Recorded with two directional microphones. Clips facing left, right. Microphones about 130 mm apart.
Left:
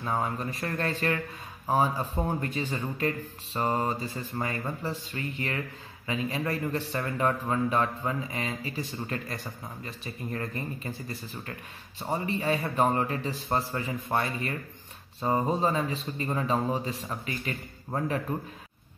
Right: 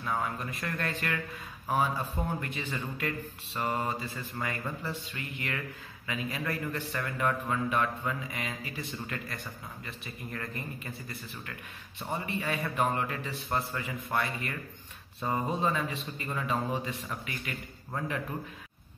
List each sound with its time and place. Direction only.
0.0 s a man's voice: 35° left (ahead or behind)